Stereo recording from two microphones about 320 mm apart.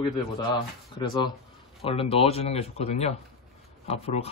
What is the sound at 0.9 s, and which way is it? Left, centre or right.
A man's voice, centre.